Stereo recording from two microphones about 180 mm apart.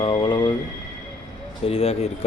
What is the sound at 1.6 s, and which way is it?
Speech, 35° left (ahead or behind).